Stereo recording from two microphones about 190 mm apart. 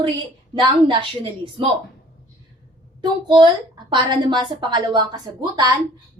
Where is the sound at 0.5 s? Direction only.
25° right (ahead or behind).